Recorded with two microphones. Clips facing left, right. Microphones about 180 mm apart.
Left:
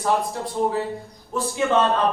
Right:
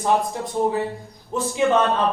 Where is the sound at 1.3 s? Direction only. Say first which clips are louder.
Right 2 dB; 15° right (ahead or behind).